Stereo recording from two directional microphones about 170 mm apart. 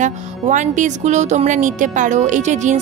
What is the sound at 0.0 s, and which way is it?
Speech, 45° right (ahead or behind).